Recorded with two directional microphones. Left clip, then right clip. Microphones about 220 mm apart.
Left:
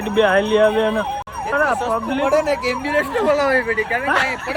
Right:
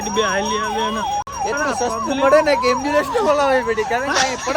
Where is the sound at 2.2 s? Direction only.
40° right (ahead or behind).